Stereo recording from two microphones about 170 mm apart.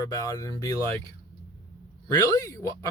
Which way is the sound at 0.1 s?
20° left (ahead or behind).